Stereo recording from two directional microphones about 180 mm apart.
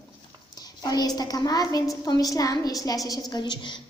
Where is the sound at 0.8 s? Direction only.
20° left (ahead or behind).